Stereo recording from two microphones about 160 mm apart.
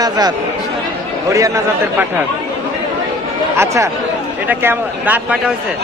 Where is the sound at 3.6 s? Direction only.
20° right (ahead or behind).